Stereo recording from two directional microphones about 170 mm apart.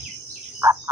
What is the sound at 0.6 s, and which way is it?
Cricket, 15° right (ahead or behind).